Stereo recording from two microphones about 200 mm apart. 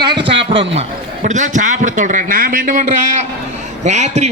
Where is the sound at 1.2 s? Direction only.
35° right (ahead or behind).